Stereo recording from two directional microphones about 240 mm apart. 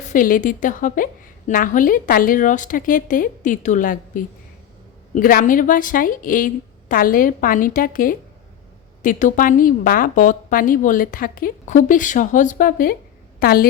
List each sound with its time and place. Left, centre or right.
0.1 s a woman's voice: left